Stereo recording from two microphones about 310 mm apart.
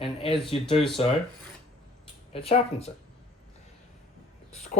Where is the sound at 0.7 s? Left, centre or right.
Centre.